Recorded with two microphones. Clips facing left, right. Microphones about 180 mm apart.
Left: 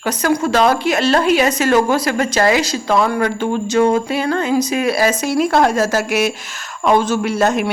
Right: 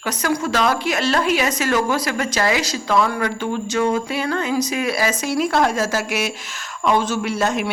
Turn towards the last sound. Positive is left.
turn(degrees=50)  # may be behind; listen again after turning